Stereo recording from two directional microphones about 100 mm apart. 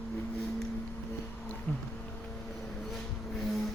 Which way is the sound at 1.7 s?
15° left (ahead or behind).